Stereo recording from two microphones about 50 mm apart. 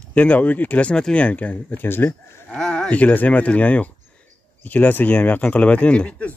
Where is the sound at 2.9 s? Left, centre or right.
Left.